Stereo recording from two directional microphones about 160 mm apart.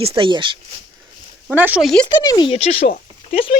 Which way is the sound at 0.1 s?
30° right (ahead or behind).